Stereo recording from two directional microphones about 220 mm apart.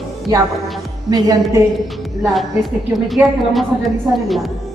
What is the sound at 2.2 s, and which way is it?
A woman's voice, centre (ahead or behind).